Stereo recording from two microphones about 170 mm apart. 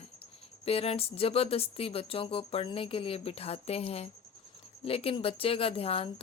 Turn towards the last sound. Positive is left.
turn(degrees=35)  # may be behind; listen again after turning